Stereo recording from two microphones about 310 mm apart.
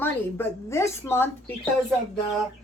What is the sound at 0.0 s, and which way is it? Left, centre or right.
A woman's voice, centre.